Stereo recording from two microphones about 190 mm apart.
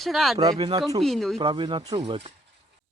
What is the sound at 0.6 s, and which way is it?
Speech, 25° right (ahead or behind).